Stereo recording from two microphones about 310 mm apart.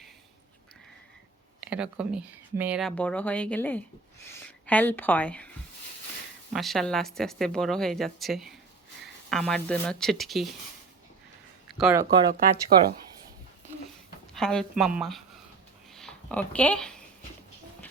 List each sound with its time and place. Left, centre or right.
1.6 s speech: centre
6.5 s speech: centre
11.8 s speech: centre
12.7 s speech: right
14.3 s speech: centre